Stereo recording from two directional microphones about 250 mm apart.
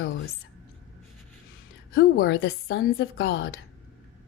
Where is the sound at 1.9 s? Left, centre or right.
Left.